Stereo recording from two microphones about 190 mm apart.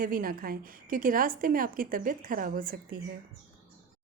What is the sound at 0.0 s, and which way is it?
Speech, 50° right (ahead or behind).